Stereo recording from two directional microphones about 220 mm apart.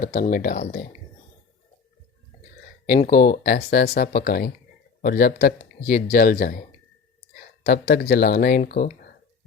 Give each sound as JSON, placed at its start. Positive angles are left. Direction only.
{"t": 0.0, "sound": "speech", "side_deg": 40}
{"t": 3.0, "sound": "speech", "side_deg": 40}